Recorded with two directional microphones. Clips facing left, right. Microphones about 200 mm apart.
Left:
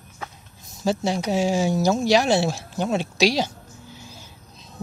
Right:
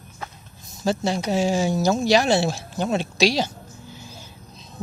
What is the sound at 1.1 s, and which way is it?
Speech, 10° left (ahead or behind).